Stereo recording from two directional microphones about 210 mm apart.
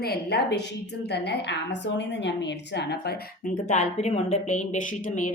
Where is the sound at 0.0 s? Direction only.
50° left (ahead or behind).